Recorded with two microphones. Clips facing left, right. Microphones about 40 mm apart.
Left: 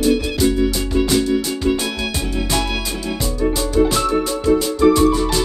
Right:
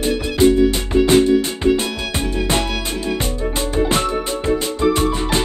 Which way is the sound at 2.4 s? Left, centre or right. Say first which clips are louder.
Right 1 dB; right.